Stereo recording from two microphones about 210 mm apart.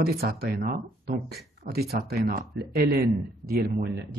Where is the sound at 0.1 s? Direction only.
45° right (ahead or behind).